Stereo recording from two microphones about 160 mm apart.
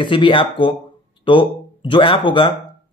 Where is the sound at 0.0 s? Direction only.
30° left (ahead or behind).